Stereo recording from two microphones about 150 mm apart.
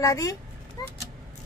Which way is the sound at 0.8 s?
25° left (ahead or behind).